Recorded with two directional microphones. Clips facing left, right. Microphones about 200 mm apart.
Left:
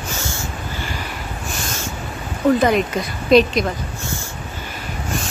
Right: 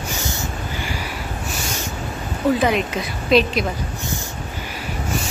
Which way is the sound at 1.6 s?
15° right (ahead or behind).